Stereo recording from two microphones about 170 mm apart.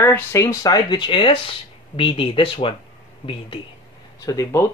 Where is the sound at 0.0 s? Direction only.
15° left (ahead or behind); by 2.7 s 30° left (ahead or behind).